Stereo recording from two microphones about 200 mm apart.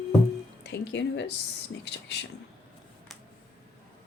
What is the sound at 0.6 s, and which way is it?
A woman's voice, 60° left (ahead or behind).